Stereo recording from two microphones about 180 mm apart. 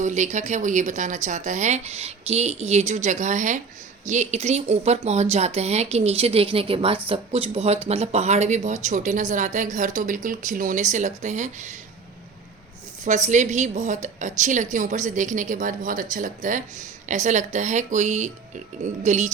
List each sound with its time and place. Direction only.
0.0 s speech: 40° right (ahead or behind)
13.1 s a woman's voice: 40° right (ahead or behind)